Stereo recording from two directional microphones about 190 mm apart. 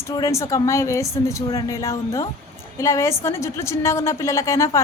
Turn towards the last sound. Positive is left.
turn(degrees=15)  # may be behind; listen again after turning